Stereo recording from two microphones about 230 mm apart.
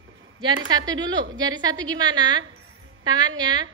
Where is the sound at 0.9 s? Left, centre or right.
Centre.